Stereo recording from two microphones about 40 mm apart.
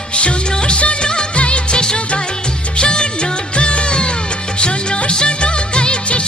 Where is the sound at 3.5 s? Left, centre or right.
Left.